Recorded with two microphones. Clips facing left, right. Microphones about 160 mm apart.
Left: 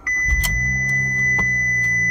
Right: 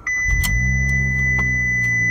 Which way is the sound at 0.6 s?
10° right (ahead or behind).